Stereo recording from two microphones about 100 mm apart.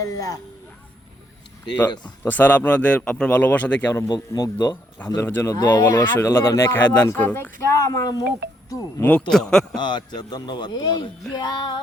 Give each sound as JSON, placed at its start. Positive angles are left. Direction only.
{"t": 0.0, "sound": "speech", "side_deg": 35}
{"t": 2.0, "sound": "speech", "side_deg": 15}
{"t": 4.1, "sound": "speech", "side_deg": 40}
{"t": 5.2, "sound": "speech", "side_deg": 25}
{"t": 5.5, "sound": "speech", "side_deg": 35}
{"t": 9.0, "sound": "speech", "side_deg": 15}
{"t": 9.3, "sound": "a man's voice", "side_deg": 5}
{"t": 9.7, "sound": "speech", "side_deg": 50}